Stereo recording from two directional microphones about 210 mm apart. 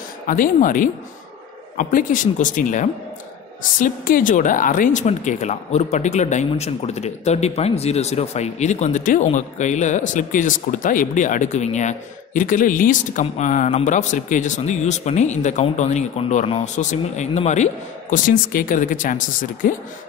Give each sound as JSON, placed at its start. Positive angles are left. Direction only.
{"t": 0.3, "sound": "a woman's voice", "side_deg": 40}